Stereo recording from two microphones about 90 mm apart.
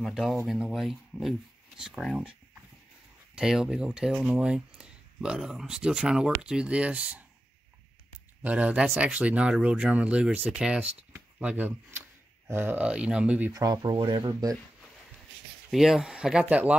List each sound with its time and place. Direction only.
0.0 s speech: 5° right (ahead or behind)
3.3 s speech: 5° right (ahead or behind)
8.5 s speech: 15° right (ahead or behind)
13.5 s speech: 45° right (ahead or behind)
13.9 s speech: 65° right (ahead or behind)
15.7 s speech: 5° right (ahead or behind)